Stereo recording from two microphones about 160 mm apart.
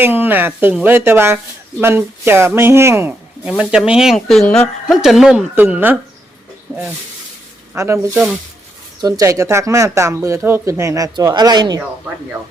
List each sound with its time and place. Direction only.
0.0 s speech: 10° right (ahead or behind)